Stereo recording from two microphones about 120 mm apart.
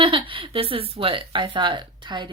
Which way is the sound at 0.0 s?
45° right (ahead or behind).